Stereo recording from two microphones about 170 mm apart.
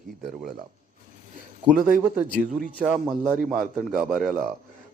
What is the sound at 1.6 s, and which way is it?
Speech, 10° right (ahead or behind).